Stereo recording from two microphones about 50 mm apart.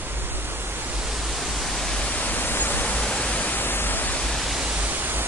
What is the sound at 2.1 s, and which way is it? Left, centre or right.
Pink noise, left.